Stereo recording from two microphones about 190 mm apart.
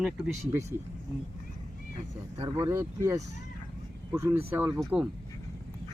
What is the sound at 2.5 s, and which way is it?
Speech, 15° right (ahead or behind).